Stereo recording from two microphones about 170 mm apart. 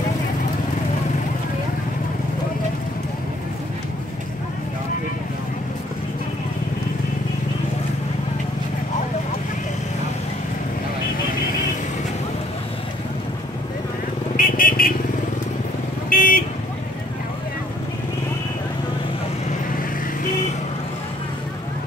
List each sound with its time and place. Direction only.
14.3 s vehicle: 55° left (ahead or behind)
16.1 s vehicle: 55° left (ahead or behind)